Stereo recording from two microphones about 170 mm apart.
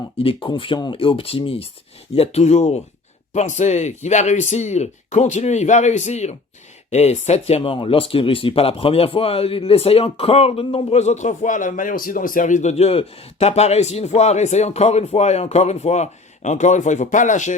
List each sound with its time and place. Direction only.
0.2 s speech: 30° left (ahead or behind)